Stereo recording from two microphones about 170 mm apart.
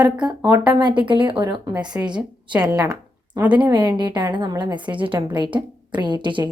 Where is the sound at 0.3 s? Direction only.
20° right (ahead or behind).